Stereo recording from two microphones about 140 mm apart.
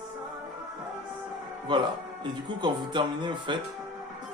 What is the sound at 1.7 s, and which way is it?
Speech, 30° right (ahead or behind).